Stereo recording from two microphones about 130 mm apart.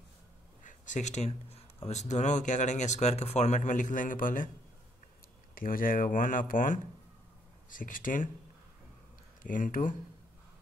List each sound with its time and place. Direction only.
0.7 s speech: 70° left (ahead or behind); by 4.5 s 90° left
5.5 s speech: 90° left
9.4 s speech: 90° left